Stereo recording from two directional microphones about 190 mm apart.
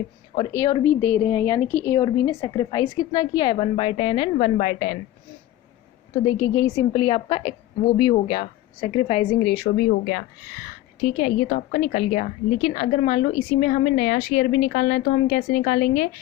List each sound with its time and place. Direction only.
0.5 s a woman's voice: 15° left (ahead or behind); by 4.9 s 35° left (ahead or behind)
6.3 s a woman's voice: 15° left (ahead or behind); by 10.2 s 50° left (ahead or behind)
11.0 s a woman's voice: 35° left (ahead or behind)